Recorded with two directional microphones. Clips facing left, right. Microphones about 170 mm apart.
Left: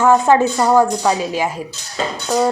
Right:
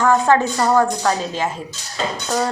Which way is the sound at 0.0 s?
15° left (ahead or behind).